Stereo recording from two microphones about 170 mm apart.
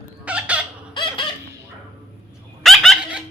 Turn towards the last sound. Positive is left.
turn(degrees=0)  # may be behind; listen again after turning